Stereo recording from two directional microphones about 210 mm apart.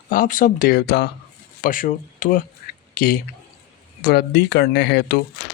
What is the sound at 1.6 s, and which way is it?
Speech, 40° left (ahead or behind).